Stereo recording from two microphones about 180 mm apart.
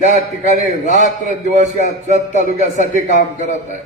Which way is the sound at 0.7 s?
45° left (ahead or behind).